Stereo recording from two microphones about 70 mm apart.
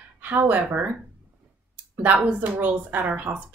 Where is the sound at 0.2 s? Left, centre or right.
Right.